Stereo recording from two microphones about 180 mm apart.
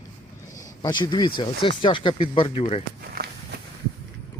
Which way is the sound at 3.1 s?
60° right (ahead or behind).